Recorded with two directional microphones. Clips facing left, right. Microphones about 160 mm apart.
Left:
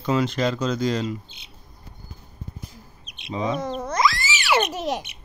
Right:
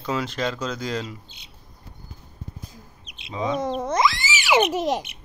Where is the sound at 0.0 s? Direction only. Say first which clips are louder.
Left 4 dB; centre (ahead or behind).